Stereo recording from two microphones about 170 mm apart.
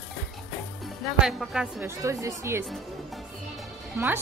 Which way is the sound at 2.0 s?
15° right (ahead or behind).